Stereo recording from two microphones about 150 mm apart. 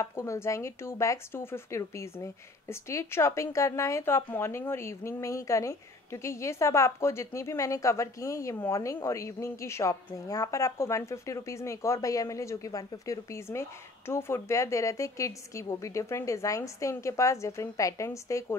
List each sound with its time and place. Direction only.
0.0 s speech: 20° left (ahead or behind)